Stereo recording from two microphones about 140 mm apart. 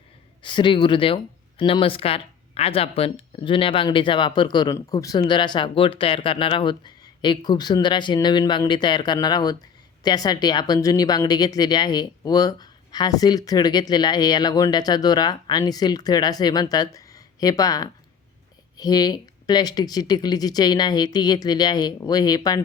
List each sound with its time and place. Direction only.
0.4 s speech: 35° left (ahead or behind)